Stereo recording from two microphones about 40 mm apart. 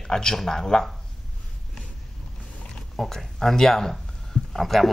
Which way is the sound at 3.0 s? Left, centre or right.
Centre.